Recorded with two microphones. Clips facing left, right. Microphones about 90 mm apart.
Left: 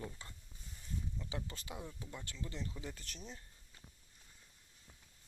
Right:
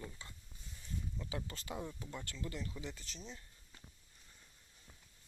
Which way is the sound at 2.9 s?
50° left (ahead or behind).